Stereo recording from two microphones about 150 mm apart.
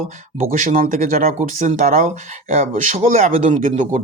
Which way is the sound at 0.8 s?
70° right (ahead or behind).